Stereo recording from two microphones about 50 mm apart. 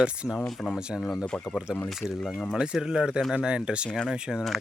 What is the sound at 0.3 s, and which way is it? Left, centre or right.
Speech, centre.